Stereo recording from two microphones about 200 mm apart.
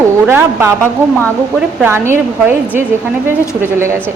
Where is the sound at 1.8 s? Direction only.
10° right (ahead or behind).